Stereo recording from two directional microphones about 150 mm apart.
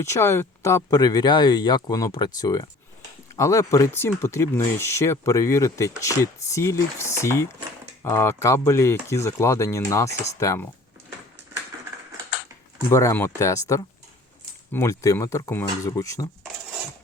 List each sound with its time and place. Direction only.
0.0 s speech: 20° left (ahead or behind)
12.9 s speech: 20° left (ahead or behind)